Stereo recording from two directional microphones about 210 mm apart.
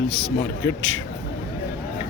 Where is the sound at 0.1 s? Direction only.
Centre (ahead or behind).